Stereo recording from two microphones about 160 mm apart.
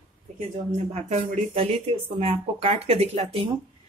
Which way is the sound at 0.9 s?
40° right (ahead or behind).